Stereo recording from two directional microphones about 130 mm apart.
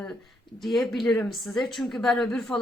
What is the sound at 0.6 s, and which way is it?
A woman's voice, centre (ahead or behind).